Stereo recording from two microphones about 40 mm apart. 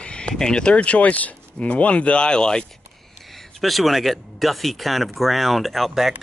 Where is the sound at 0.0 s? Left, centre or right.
Left.